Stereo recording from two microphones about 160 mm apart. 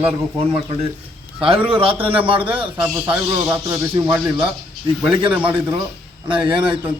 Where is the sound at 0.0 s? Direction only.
35° right (ahead or behind).